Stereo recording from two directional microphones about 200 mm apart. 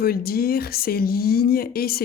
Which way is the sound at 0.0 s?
50° left (ahead or behind).